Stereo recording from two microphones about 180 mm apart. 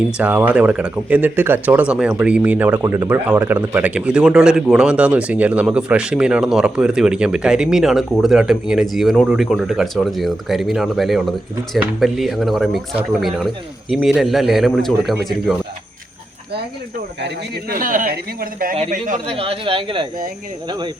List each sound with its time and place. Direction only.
0.2 s speech: 10° right (ahead or behind)
17.2 s speech: 65° right (ahead or behind)
19.3 s speech: 30° right (ahead or behind)